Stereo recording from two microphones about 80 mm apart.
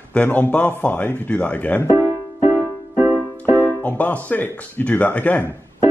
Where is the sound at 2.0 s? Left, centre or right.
Right.